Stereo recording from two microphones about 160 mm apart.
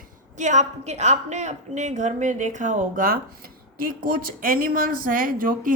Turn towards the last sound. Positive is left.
turn(degrees=-60)  # may be behind; listen again after turning